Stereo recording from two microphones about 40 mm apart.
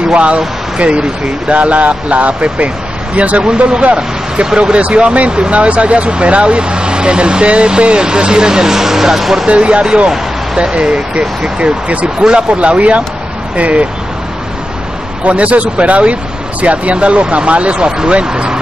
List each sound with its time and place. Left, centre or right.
0.1 s speech: right; by 9.5 s centre
9.5 s speech: right
12.2 s speech: right
12.4 s speech: right
15.2 s speech: right
17.8 s speech: right